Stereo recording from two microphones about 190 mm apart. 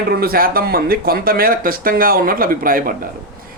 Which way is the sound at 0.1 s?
55° right (ahead or behind).